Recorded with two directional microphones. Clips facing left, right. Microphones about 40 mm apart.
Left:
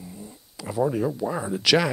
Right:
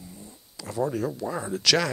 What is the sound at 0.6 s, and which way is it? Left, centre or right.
Speech, centre.